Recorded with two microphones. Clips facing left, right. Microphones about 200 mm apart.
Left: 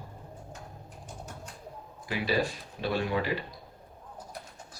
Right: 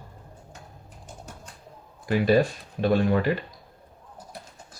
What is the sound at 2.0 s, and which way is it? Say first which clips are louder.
Speech: right 8 dB; 50° right (ahead or behind).